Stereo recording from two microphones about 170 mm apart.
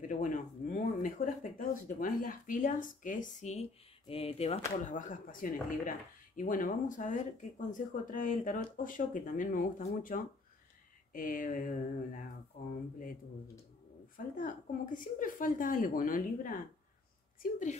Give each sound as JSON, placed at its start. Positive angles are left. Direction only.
{"t": 0.1, "sound": "speech", "side_deg": 50}
{"t": 14.1, "sound": "speech", "side_deg": 50}